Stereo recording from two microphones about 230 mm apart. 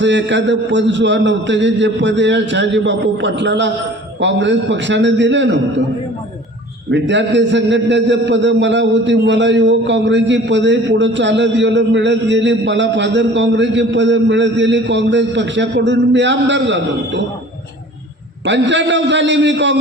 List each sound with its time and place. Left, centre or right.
0.0 s a man's voice: right
6.9 s a man's voice: right
18.4 s a man's voice: right